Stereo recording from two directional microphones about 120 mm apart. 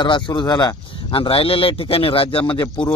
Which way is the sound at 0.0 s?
40° left (ahead or behind).